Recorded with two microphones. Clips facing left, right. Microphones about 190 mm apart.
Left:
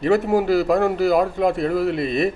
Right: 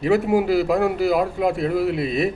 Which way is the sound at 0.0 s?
10° right (ahead or behind).